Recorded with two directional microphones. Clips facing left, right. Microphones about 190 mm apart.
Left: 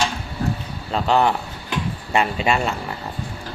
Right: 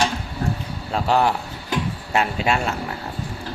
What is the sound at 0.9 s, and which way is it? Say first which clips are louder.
Speech: left 1 dB; 5° right (ahead or behind).